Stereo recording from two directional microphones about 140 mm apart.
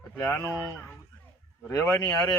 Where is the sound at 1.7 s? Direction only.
25° left (ahead or behind).